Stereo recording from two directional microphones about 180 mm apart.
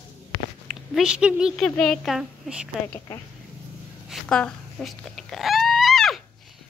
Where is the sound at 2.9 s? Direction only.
20° left (ahead or behind).